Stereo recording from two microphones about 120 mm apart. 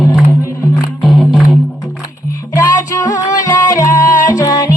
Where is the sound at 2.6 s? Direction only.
30° left (ahead or behind).